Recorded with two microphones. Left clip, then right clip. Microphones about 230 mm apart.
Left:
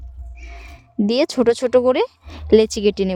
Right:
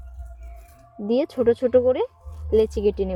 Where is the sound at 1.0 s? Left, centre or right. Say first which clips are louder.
Left 3 dB; left.